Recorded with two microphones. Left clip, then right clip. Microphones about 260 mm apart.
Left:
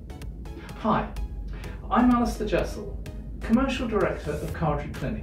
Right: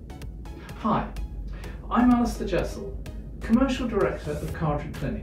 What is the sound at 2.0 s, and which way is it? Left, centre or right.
Speech, centre.